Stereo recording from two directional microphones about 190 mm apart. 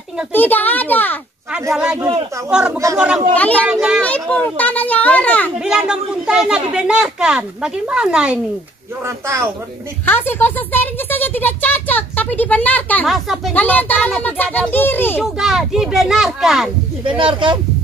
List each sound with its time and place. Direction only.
0.3 s speech: 10° left (ahead or behind)
1.5 s speech: 5° right (ahead or behind)
3.3 s speech: 10° left (ahead or behind)
3.6 s speech: 5° right (ahead or behind)
4.0 s speech: 10° left (ahead or behind)
5.6 s speech: 5° right (ahead or behind)
10.0 s speech: 10° left (ahead or behind)
15.2 s speech: centre (ahead or behind)
17.2 s speech: 25° right (ahead or behind)